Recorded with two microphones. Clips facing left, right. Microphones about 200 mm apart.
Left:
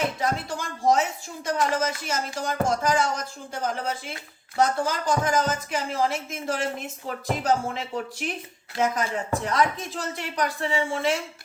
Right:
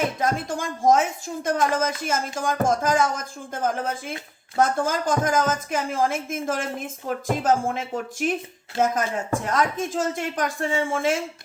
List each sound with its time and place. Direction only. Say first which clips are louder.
0.2 s a woman's voice: right 3 dB; 50° right (ahead or behind)